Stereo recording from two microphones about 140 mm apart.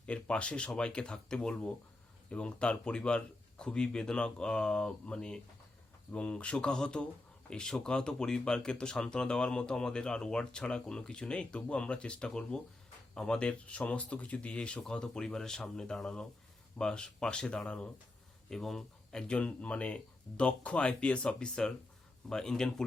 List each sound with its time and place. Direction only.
0.0 s speech: 10° left (ahead or behind)